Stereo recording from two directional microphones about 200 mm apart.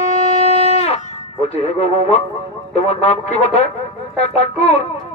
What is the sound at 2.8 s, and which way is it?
Speech, 30° left (ahead or behind).